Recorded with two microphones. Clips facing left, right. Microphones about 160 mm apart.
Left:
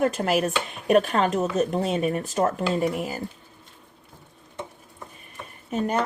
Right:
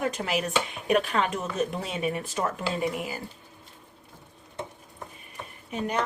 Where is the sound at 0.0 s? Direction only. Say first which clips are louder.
Left 6 dB; 45° left (ahead or behind).